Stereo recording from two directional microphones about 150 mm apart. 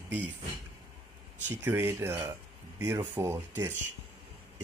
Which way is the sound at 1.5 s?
15° right (ahead or behind).